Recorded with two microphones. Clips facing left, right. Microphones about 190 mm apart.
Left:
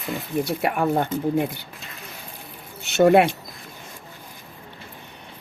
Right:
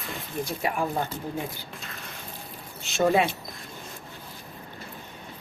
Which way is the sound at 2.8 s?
70° left (ahead or behind).